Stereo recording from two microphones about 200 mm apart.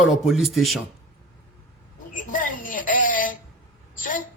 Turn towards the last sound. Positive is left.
turn(degrees=40)  # may be behind; listen again after turning